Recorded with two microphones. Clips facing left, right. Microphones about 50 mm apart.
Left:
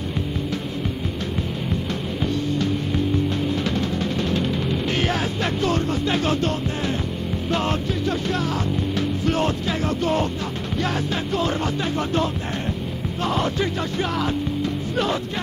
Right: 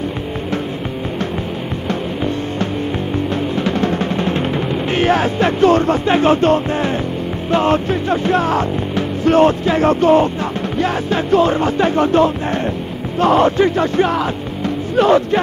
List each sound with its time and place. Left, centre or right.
3.5 s music: right
10.8 s music: right
15.0 s music: right